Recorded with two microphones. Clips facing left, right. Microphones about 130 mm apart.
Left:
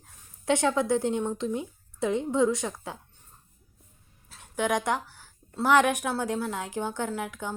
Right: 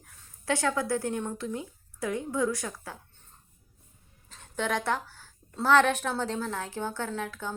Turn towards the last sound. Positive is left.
turn(degrees=15)  # may be behind; listen again after turning